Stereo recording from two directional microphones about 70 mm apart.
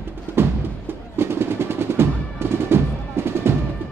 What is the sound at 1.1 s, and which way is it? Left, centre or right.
Drum roll, right.